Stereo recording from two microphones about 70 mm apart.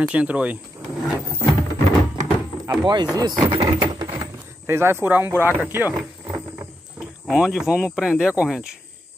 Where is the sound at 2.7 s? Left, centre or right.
Right.